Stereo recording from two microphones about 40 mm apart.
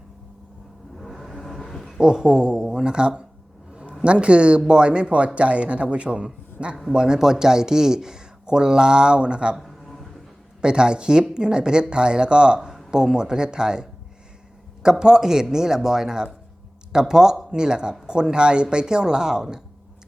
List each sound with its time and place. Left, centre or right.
0.9 s vehicle: centre
2.0 s a man's voice: centre
6.9 s speech: centre
9.6 s a sound: centre
10.6 s speech: right